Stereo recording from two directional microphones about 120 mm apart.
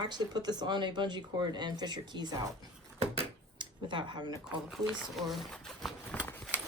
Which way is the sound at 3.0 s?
55° right (ahead or behind).